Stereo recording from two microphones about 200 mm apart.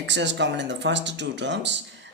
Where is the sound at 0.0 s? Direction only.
60° right (ahead or behind).